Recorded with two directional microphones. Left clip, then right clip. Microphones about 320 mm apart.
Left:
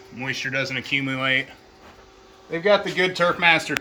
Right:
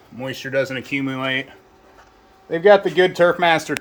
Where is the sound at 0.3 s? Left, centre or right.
Centre.